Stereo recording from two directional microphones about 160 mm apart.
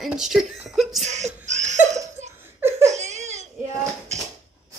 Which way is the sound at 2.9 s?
45° right (ahead or behind).